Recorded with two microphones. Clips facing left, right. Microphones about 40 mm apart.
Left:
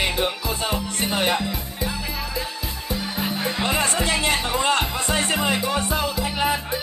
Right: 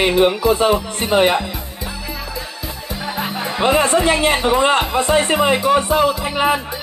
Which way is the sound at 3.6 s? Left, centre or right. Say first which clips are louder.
Right 10 dB; right.